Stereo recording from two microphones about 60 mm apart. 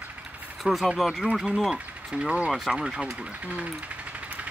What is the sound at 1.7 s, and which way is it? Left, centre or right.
Speech, centre.